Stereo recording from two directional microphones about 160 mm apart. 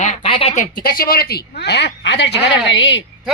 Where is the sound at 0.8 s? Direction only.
70° left (ahead or behind).